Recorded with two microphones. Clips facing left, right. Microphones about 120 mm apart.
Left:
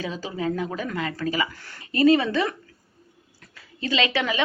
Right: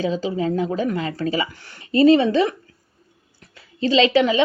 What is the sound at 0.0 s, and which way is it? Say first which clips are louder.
A woman's voice: right 6 dB; 25° right (ahead or behind).